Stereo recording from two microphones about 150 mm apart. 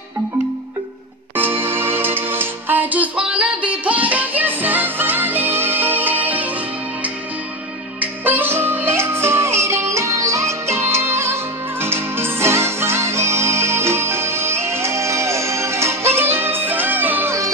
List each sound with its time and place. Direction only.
1.3 s music: 15° right (ahead or behind)
8.0 s music: 15° right (ahead or behind)